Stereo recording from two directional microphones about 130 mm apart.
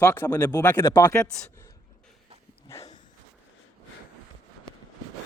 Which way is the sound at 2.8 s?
60° left (ahead or behind).